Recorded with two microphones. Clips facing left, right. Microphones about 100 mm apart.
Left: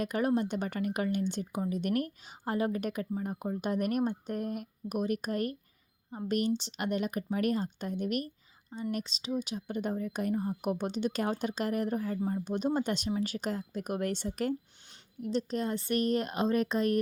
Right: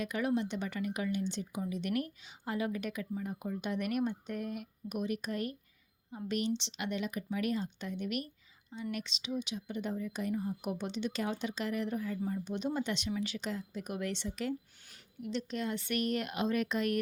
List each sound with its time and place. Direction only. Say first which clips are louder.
0.0 s speech: left 4 dB; 45° left (ahead or behind)